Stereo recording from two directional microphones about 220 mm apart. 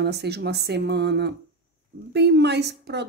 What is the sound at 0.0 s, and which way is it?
A woman's voice, 50° right (ahead or behind).